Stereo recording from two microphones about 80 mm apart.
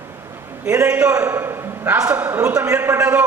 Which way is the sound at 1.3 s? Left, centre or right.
Right.